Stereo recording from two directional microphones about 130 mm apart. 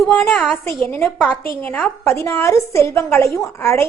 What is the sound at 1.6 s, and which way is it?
A woman's voice, 10° left (ahead or behind).